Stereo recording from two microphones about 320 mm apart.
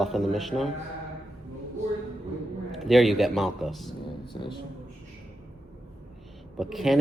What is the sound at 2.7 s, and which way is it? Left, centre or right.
Speech, centre.